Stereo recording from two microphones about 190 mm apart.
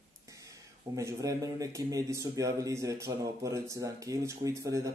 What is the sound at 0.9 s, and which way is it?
A man's voice, 15° right (ahead or behind).